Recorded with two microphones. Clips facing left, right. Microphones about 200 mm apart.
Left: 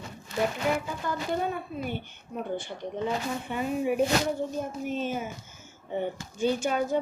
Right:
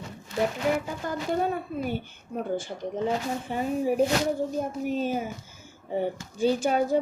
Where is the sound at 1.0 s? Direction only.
45° right (ahead or behind).